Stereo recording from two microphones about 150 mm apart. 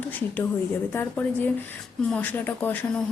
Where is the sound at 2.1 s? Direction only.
10° left (ahead or behind).